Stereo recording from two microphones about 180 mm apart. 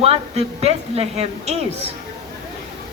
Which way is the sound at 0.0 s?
35° right (ahead or behind).